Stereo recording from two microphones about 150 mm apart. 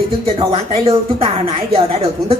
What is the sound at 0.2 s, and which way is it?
Speech, 40° right (ahead or behind).